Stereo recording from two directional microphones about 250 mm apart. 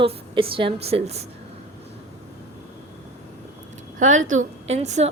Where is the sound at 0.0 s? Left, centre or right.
Right.